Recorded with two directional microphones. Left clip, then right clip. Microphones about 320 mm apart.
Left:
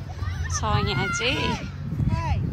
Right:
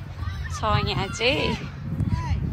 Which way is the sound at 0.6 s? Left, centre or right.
Centre.